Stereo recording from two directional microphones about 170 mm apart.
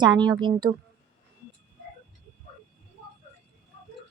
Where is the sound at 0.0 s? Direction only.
25° right (ahead or behind).